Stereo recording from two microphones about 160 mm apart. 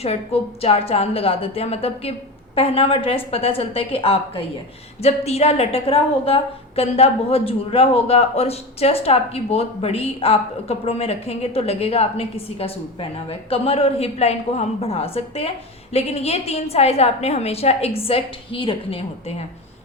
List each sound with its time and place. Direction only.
0.0 s a woman's voice: 40° left (ahead or behind)